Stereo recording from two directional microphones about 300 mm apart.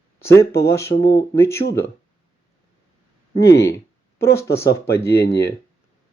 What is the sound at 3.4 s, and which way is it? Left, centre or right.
Speech, centre.